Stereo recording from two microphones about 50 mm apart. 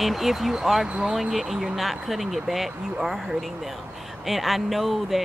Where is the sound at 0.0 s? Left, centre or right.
Centre.